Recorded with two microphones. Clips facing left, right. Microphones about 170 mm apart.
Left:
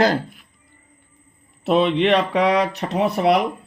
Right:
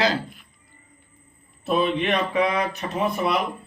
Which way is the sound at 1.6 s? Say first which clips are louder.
Left 5 dB; 70° left (ahead or behind).